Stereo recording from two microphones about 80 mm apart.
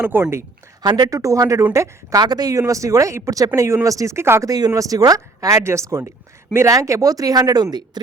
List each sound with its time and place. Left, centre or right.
0.0 s speech: right
0.8 s speech: right
1.1 s speech: right
2.2 s speech: right
4.4 s speech: right